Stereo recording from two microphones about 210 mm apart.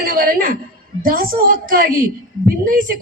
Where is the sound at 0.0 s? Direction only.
45° right (ahead or behind).